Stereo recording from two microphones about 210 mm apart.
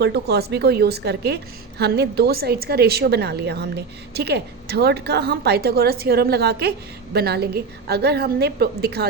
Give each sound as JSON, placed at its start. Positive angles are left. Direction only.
{"t": 0.0, "sound": "a woman's voice", "side_deg": -50}